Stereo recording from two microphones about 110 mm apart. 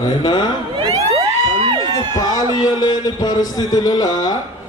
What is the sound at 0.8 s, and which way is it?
Crowd, 35° right (ahead or behind).